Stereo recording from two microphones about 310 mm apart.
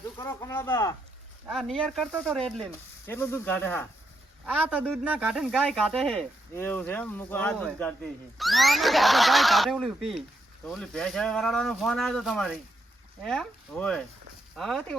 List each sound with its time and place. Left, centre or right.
0.2 s speech: centre
4.4 s speech: centre